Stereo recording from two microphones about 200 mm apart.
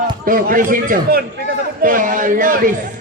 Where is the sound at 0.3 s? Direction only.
45° right (ahead or behind).